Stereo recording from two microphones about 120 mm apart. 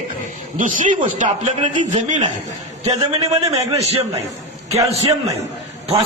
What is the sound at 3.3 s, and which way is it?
Speech, 60° right (ahead or behind).